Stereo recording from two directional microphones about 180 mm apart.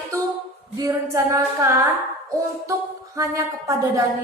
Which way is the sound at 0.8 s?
20° right (ahead or behind).